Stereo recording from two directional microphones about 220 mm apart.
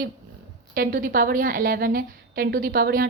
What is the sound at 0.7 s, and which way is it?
A woman's voice, 40° right (ahead or behind).